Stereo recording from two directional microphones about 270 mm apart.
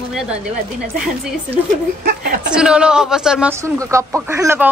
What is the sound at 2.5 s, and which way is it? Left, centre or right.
A woman's voice, centre.